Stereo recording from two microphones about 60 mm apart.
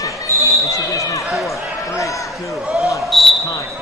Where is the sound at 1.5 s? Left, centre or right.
Left.